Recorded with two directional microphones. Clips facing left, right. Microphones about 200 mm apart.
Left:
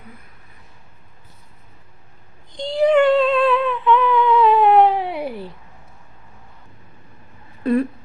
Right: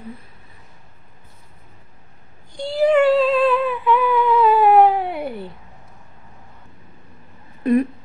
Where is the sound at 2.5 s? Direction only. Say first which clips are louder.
Left 1 dB; 5° right (ahead or behind).